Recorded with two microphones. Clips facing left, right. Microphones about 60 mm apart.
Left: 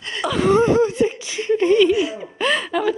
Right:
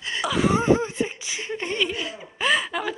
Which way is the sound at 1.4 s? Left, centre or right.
Centre.